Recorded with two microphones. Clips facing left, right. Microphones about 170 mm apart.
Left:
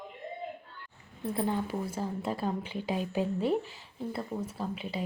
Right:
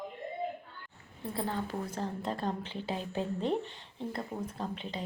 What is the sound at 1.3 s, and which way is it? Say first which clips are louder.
A woman's voice: left 4 dB; 15° left (ahead or behind).